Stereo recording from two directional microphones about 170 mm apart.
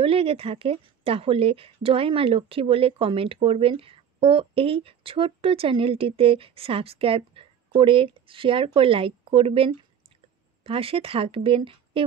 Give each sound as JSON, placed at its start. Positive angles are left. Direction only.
{"t": 0.0, "sound": "a woman's voice", "side_deg": -35}